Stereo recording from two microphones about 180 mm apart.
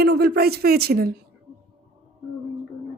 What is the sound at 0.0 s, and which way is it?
Speech, 60° right (ahead or behind).